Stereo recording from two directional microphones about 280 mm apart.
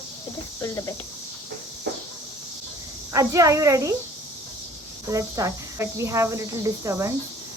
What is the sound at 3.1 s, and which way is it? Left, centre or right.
Speech, centre.